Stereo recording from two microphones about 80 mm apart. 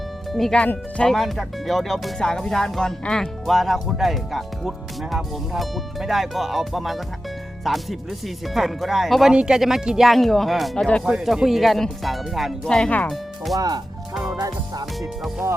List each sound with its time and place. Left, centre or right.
0.3 s speech: centre
0.6 s speech: centre
1.1 s speech: centre
13.6 s speech: right